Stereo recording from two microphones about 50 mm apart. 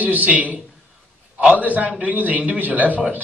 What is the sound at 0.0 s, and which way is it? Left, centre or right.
A man's voice, right.